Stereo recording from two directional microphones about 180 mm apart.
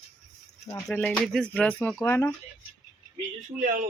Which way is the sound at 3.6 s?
50° right (ahead or behind).